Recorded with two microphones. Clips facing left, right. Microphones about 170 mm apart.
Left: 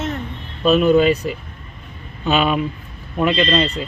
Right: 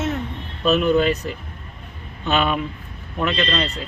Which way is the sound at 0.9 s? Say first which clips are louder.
Left 4 dB; 10° left (ahead or behind).